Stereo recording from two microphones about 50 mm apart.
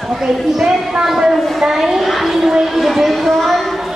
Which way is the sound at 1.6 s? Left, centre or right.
Centre.